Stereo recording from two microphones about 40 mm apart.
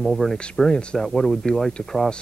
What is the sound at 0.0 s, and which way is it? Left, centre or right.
Speech, centre.